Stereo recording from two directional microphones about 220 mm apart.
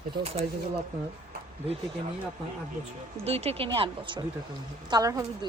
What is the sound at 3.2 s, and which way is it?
Speech, 25° right (ahead or behind).